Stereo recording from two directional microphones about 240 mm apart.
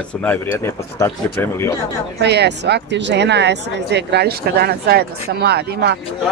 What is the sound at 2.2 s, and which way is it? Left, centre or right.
A woman's voice, right.